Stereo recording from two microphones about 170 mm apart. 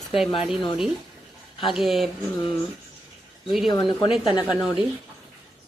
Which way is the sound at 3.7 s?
25° left (ahead or behind).